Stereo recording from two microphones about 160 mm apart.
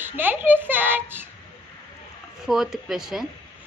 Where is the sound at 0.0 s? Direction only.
10° right (ahead or behind).